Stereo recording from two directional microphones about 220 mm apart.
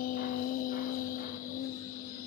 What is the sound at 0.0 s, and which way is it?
Music, 40° left (ahead or behind).